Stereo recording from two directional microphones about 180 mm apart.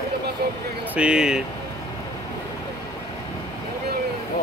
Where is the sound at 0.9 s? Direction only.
5° right (ahead or behind).